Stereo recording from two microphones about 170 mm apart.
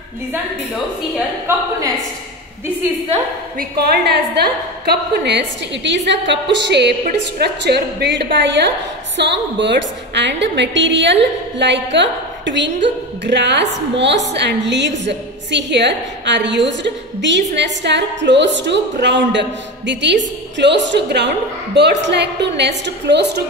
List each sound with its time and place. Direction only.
1.5 s a woman's voice: 15° right (ahead or behind)
3.5 s a woman's voice: 75° right (ahead or behind)